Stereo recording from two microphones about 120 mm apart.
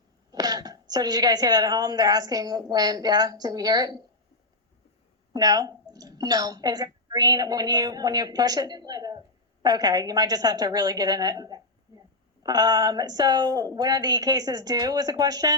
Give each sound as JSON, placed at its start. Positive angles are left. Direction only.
{"t": 0.3, "sound": "speech", "side_deg": -35}
{"t": 5.3, "sound": "a woman's voice", "side_deg": -30}
{"t": 11.9, "sound": "a sound", "side_deg": -30}
{"t": 12.4, "sound": "speech", "side_deg": -35}